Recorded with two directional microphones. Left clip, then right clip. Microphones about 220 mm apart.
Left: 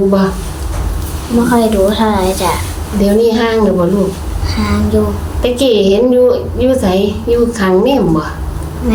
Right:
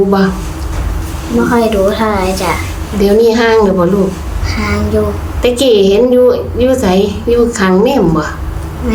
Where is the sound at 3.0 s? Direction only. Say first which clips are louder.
Right 3 dB; 25° right (ahead or behind).